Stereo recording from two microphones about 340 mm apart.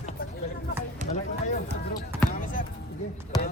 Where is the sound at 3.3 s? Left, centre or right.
Centre.